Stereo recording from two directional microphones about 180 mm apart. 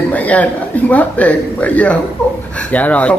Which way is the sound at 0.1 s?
10° left (ahead or behind).